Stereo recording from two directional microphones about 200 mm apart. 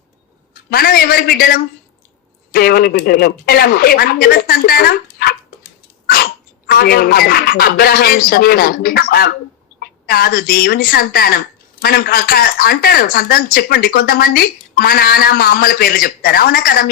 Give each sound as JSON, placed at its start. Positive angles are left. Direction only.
{"t": 0.5, "sound": "a woman's voice", "side_deg": 45}
{"t": 6.7, "sound": "a woman's voice", "side_deg": 50}